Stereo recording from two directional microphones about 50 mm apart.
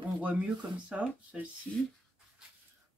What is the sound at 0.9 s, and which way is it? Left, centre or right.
Speech, centre.